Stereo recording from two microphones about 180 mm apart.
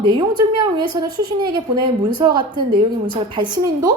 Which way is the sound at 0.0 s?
25° right (ahead or behind).